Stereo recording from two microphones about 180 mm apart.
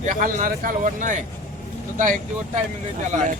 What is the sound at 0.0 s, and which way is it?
A man's voice, 45° right (ahead or behind).